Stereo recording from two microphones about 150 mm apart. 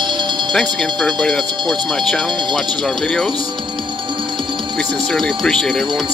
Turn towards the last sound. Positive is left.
turn(degrees=0)  # may be behind; listen again after turning